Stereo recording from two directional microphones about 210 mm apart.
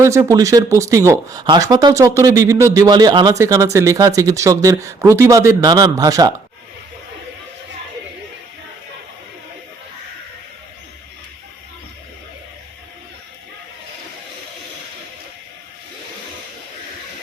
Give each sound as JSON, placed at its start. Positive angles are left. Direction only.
{"t": 0.0, "sound": "speech", "side_deg": -15}